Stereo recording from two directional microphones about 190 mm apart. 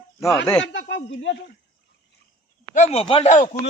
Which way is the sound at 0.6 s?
70° left (ahead or behind).